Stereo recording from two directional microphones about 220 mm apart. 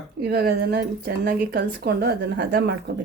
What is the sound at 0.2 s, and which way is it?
Speech, 45° right (ahead or behind).